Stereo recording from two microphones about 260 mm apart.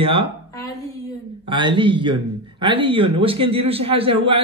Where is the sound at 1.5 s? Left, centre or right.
Centre.